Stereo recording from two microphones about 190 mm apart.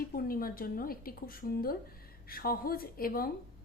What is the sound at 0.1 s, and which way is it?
A woman's voice, 50° left (ahead or behind).